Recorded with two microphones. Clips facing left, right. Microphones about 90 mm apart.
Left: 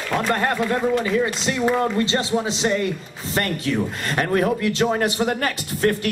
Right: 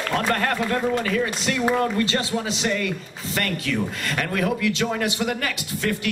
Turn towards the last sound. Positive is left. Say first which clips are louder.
# left 4 dB
turn(degrees=40)  # may be behind; listen again after turning